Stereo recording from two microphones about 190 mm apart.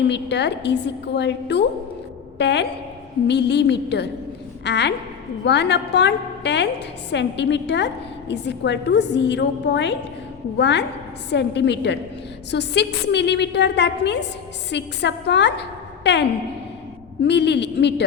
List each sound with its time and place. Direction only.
0.1 s a woman's voice: 65° left (ahead or behind)
17.2 s a woman's voice: 65° left (ahead or behind)